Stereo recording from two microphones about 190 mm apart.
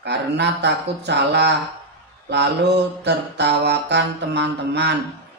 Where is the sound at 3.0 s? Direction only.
65° right (ahead or behind).